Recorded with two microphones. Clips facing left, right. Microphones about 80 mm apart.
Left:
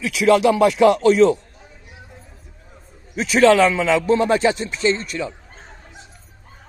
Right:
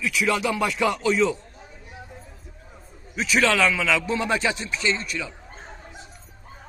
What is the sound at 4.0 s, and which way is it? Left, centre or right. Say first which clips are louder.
Speech: left 8 dB; left.